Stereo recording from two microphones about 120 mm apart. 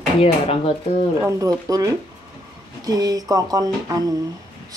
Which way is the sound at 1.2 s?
30° right (ahead or behind).